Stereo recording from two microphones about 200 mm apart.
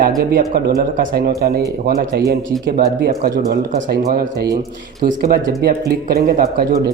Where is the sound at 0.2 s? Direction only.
45° right (ahead or behind).